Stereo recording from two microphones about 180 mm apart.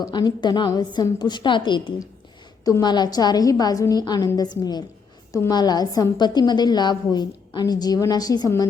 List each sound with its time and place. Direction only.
0.0 s a woman's voice: 25° left (ahead or behind)